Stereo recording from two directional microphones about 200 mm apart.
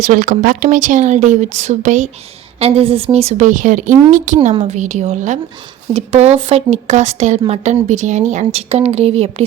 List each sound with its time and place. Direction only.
0.1 s speech: 40° right (ahead or behind)